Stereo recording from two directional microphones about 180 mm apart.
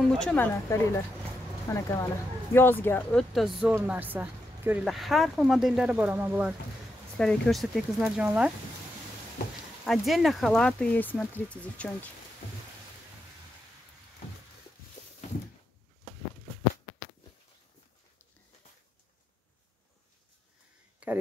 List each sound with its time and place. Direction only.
0.2 s speech: 10° left (ahead or behind); by 6.5 s 10° right (ahead or behind)
7.2 s speech: 5° left (ahead or behind)
9.8 s speech: centre (ahead or behind)
21.0 s a sound: 10° right (ahead or behind)